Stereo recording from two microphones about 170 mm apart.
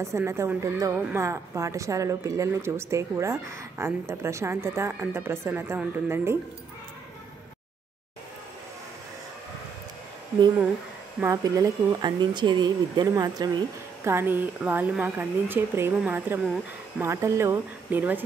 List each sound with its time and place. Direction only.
0.0 s a woman's voice: 15° right (ahead or behind)
11.1 s speech: 20° right (ahead or behind)
14.0 s a woman's voice: 15° right (ahead or behind)